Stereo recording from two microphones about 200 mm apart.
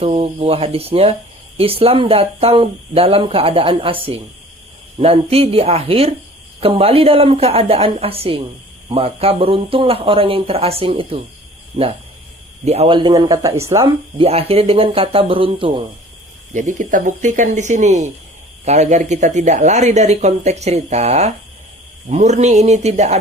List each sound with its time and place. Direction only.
0.0 s speech: 30° right (ahead or behind); by 13.9 s 15° right (ahead or behind)
14.2 s speech: 30° right (ahead or behind)
16.6 s speech: 40° right (ahead or behind)